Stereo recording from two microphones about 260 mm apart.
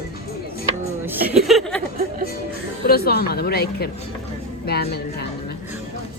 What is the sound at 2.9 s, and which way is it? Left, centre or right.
Speech, left.